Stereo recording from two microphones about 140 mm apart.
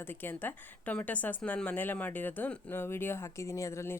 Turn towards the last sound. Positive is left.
turn(degrees=20)  # may be behind; listen again after turning